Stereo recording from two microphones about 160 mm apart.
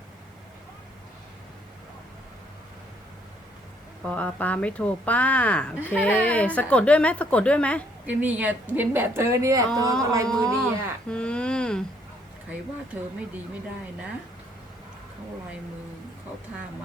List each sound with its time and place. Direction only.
4.0 s speech: 10° left (ahead or behind)
8.0 s a woman's voice: 10° right (ahead or behind)
10.0 s a sound: 20° right (ahead or behind)
10.2 s speech: 5° left (ahead or behind)
11.1 s a sound: 5° left (ahead or behind)
12.5 s a woman's voice: 10° right (ahead or behind)